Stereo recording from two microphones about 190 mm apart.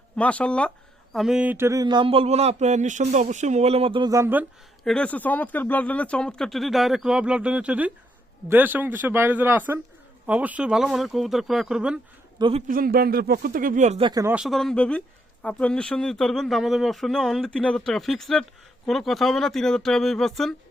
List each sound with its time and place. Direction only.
0.2 s speech: 5° left (ahead or behind); by 4.4 s 10° right (ahead or behind)
4.8 s a man's voice: 5° left (ahead or behind)
12.4 s speech: 30° right (ahead or behind)
12.6 s speech: 50° right (ahead or behind)
14.0 s speech: 20° right (ahead or behind)
14.3 s speech: centre (ahead or behind)